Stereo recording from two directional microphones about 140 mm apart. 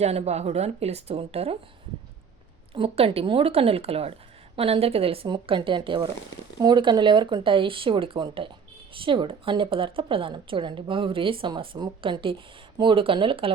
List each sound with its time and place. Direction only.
0.0 s speech: 50° right (ahead or behind)
2.7 s a woman's voice: 45° right (ahead or behind)